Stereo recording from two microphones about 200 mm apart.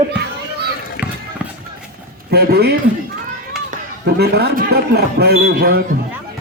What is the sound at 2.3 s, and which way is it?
Speech, 50° right (ahead or behind).